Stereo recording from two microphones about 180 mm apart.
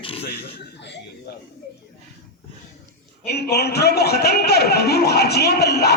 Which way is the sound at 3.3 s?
60° left (ahead or behind).